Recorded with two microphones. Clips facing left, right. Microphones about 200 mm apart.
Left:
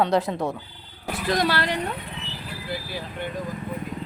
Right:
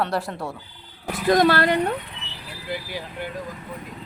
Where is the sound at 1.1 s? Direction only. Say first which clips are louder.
Right 6 dB; 50° right (ahead or behind).